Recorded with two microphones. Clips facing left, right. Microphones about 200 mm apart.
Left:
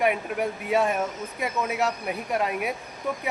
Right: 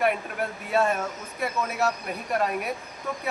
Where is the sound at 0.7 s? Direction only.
15° left (ahead or behind).